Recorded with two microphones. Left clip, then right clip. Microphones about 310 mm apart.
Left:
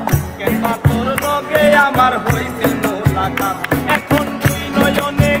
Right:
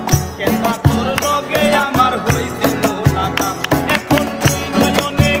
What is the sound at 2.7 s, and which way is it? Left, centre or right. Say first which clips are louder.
Music: right 1 dB; centre.